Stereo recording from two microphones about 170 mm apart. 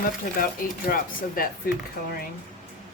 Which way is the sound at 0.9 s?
55° left (ahead or behind).